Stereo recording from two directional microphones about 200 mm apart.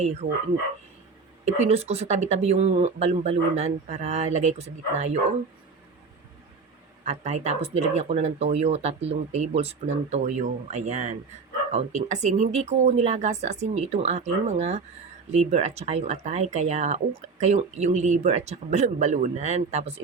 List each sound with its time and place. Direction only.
0.0 s speech: 35° right (ahead or behind)
1.5 s speech: 35° right (ahead or behind)
7.0 s speech: 35° right (ahead or behind)